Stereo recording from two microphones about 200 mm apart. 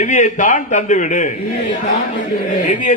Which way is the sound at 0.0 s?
40° left (ahead or behind).